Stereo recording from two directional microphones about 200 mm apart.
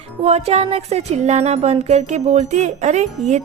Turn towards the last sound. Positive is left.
turn(degrees=-35)  # may be behind; listen again after turning